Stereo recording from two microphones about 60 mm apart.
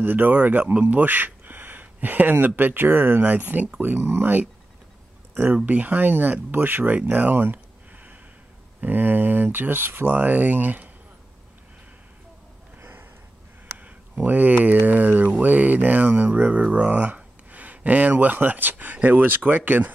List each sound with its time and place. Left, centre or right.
0.0 s speech: right
5.7 s speech: right
7.1 s a sound: right
8.8 s speech: right
14.2 s speech: right